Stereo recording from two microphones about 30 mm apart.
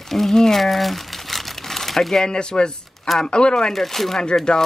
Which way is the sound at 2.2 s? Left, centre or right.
Left.